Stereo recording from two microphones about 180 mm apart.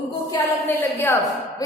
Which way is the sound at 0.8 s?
10° left (ahead or behind).